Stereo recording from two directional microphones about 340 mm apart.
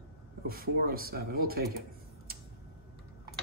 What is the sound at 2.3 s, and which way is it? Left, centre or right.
Tick-tock, right.